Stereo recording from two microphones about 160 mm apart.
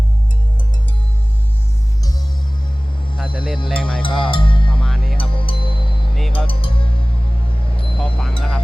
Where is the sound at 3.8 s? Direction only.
5° left (ahead or behind).